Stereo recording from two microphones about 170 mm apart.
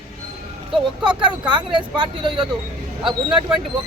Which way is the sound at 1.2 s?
25° right (ahead or behind).